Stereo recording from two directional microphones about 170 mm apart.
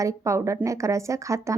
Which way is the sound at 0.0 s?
20° right (ahead or behind).